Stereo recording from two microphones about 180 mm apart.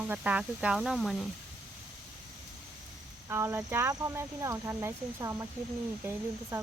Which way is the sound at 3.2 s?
15° right (ahead or behind).